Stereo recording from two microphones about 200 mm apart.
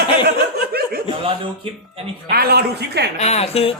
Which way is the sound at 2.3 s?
50° right (ahead or behind).